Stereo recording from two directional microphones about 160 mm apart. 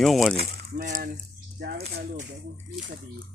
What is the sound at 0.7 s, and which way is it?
Speech, 60° right (ahead or behind).